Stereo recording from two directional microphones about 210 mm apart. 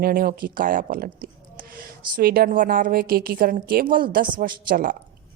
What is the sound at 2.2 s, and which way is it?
A woman's voice, 45° right (ahead or behind).